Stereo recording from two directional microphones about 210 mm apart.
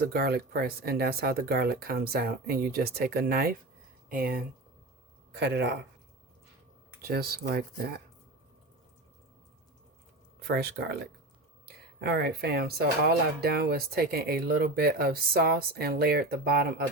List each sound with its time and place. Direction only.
0.1 s speech: 45° right (ahead or behind)
5.3 s speech: 55° right (ahead or behind)
7.0 s speech: 45° right (ahead or behind)
10.4 s speech: 50° right (ahead or behind)